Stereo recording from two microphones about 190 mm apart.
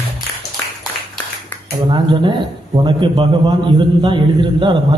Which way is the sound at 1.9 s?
25° right (ahead or behind).